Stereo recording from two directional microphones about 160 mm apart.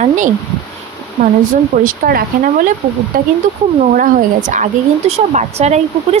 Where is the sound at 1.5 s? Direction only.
60° right (ahead or behind).